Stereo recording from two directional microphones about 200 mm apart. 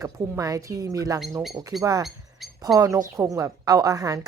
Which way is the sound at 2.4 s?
Centre (ahead or behind).